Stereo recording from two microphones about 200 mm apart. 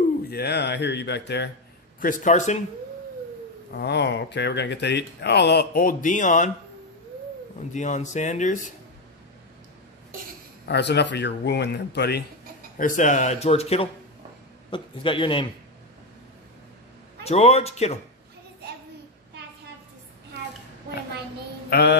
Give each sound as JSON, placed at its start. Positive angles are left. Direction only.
{"t": 0.3, "sound": "speech", "side_deg": 55}
{"t": 2.0, "sound": "speech", "side_deg": 40}
{"t": 3.7, "sound": "speech", "side_deg": 55}
{"t": 7.7, "sound": "speech", "side_deg": 35}
{"t": 10.7, "sound": "speech", "side_deg": 60}
{"t": 12.7, "sound": "speech", "side_deg": 40}
{"t": 17.2, "sound": "speech", "side_deg": 30}
{"t": 21.6, "sound": "a sound", "side_deg": 55}